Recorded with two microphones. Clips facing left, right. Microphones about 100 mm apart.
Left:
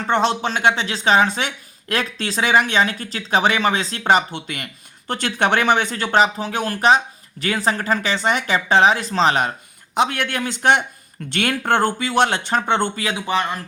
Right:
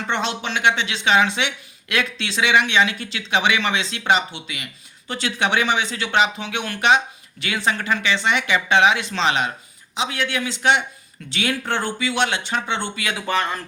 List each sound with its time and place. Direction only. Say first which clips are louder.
0.1 s speech: left 6 dB; 40° left (ahead or behind)
9.9 s speech: left 4 dB; 50° left (ahead or behind)
13.1 s speech: even; 20° left (ahead or behind)